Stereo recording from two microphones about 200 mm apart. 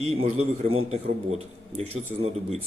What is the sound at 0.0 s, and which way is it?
A man's voice, 30° right (ahead or behind).